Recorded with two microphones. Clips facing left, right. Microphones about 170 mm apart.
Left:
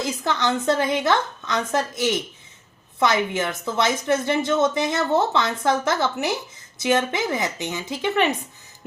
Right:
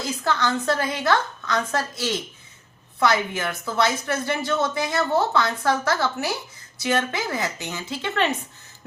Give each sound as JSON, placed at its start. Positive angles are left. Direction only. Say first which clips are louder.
{"t": 0.0, "sound": "a woman's voice", "louder": "left 1 dB", "side_deg": 20}